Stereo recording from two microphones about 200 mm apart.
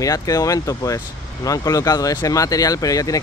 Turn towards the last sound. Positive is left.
turn(degrees=15)  # may be behind; listen again after turning